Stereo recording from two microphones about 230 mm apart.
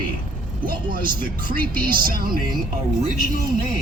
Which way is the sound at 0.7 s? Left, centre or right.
Right.